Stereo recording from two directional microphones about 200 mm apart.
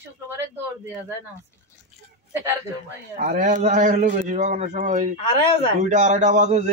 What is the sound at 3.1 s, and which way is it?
Speech, 45° right (ahead or behind).